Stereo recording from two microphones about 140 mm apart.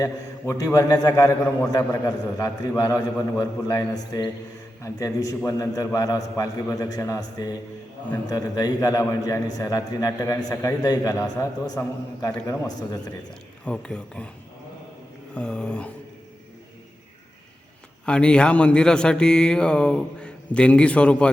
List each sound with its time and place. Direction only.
0.0 s a man's voice: 25° left (ahead or behind)
13.7 s speech: 5° left (ahead or behind)
15.4 s speech: 10° left (ahead or behind)
18.0 s speech: 5° left (ahead or behind)